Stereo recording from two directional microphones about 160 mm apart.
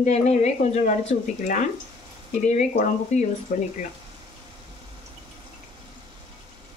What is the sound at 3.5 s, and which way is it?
Speech, 60° left (ahead or behind).